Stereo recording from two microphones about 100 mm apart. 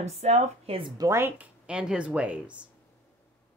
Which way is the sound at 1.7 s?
10° right (ahead or behind).